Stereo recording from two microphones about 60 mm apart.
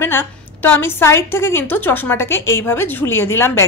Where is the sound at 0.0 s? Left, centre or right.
Left.